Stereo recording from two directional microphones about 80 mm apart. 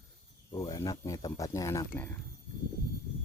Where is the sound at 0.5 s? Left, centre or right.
Left.